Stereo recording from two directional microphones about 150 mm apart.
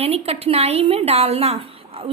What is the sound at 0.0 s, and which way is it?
A woman's voice, 40° right (ahead or behind).